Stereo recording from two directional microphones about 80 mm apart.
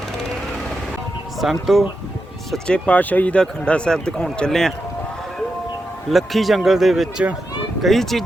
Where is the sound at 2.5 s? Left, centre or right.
Centre.